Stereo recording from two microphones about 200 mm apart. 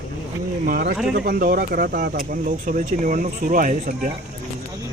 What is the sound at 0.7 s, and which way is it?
Speech, 50° right (ahead or behind).